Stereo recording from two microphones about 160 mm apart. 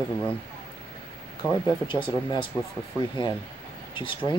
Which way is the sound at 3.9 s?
30° left (ahead or behind).